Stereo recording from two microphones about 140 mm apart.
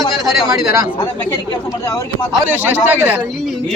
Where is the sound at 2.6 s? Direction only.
15° right (ahead or behind).